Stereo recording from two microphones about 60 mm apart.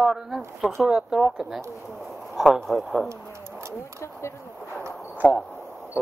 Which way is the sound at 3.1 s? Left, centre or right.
Right.